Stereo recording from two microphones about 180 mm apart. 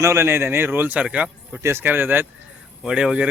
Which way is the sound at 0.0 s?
15° right (ahead or behind).